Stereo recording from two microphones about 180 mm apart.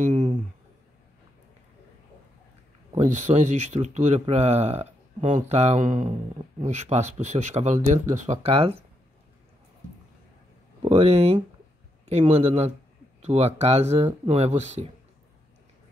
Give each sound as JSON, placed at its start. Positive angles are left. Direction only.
{"t": 0.0, "sound": "a sound", "side_deg": -40}
{"t": 2.9, "sound": "speech", "side_deg": -40}
{"t": 10.8, "sound": "speech", "side_deg": -35}